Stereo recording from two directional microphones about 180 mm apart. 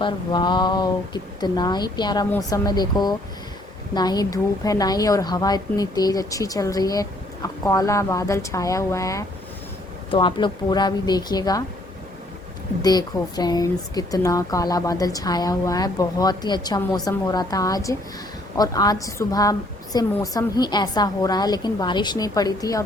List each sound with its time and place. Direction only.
0.0 s a woman's voice: 25° left (ahead or behind)
12.8 s a woman's voice: 20° left (ahead or behind)